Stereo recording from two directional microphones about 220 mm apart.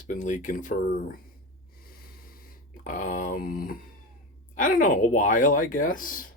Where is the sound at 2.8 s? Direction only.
35° left (ahead or behind).